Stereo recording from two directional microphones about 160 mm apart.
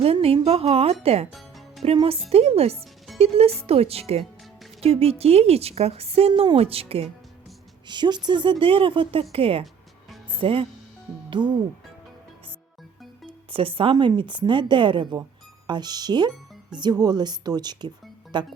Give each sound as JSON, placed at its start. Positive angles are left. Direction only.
{"t": 0.0, "sound": "speech", "side_deg": -40}
{"t": 1.3, "sound": "music", "side_deg": 0}
{"t": 1.8, "sound": "speech", "side_deg": -35}
{"t": 13.2, "sound": "speech", "side_deg": -35}